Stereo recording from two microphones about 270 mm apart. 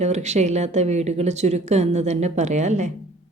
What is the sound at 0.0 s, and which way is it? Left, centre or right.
Speech, right.